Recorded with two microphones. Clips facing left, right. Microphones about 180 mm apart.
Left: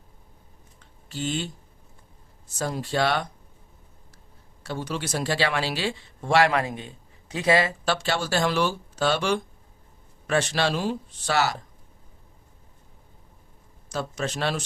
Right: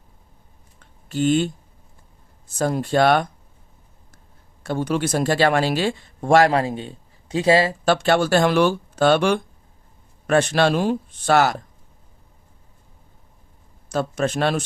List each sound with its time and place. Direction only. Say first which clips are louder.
0.8 s typing: right 10 dB; 55° right (ahead or behind)
2.6 s speech: right 7 dB; 55° right (ahead or behind)
4.6 s speech: right 8 dB; 50° right (ahead or behind); by 7.8 s 30° right (ahead or behind)
7.9 s speech: right 8 dB; 55° right (ahead or behind)
13.9 s speech: right 7 dB; 55° right (ahead or behind)